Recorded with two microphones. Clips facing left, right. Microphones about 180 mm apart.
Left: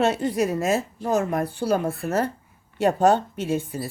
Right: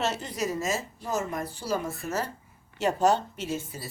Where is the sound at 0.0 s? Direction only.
55° left (ahead or behind).